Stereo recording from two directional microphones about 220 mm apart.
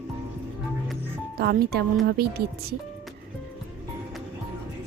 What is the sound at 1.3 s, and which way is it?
A woman's voice, 45° right (ahead or behind).